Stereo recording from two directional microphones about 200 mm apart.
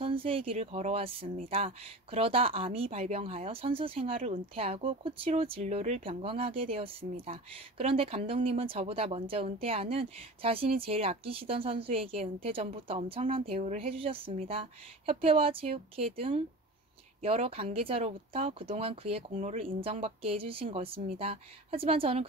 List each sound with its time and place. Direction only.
0.0 s speech: 25° right (ahead or behind)